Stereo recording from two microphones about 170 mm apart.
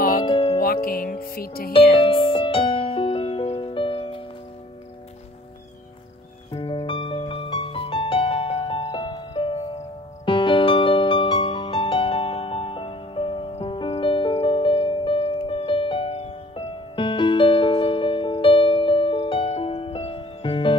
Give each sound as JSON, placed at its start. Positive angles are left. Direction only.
{"t": 0.2, "sound": "music", "side_deg": 30}
{"t": 0.6, "sound": "music", "side_deg": 60}
{"t": 2.0, "sound": "music", "side_deg": 30}
{"t": 6.5, "sound": "music", "side_deg": 35}